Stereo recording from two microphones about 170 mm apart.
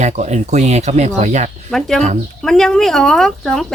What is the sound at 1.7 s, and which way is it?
Speech, 5° left (ahead or behind).